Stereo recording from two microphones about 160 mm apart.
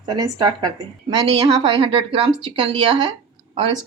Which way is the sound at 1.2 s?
35° right (ahead or behind).